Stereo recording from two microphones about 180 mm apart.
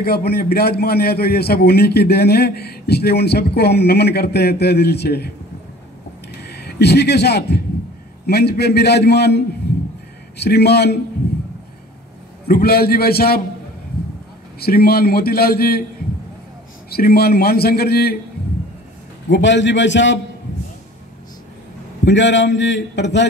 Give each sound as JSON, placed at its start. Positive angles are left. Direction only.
{"t": 0.0, "sound": "a man's voice", "side_deg": 60}
{"t": 6.4, "sound": "a man's voice", "side_deg": 65}
{"t": 12.4, "sound": "a man's voice", "side_deg": 55}
{"t": 14.6, "sound": "a man's voice", "side_deg": 60}
{"t": 16.9, "sound": "a man's voice", "side_deg": 60}
{"t": 19.3, "sound": "a man's voice", "side_deg": 80}
{"t": 22.0, "sound": "a man's voice", "side_deg": 80}